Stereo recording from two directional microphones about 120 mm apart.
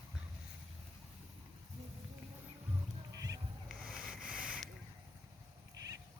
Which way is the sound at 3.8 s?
5° right (ahead or behind).